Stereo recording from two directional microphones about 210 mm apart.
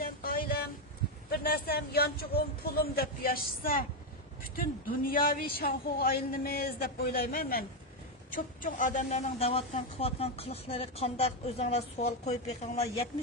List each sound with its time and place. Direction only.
0.0 s vehicle: 45° left (ahead or behind)
1.3 s a man's voice: 50° left (ahead or behind); by 12.8 s 30° left (ahead or behind)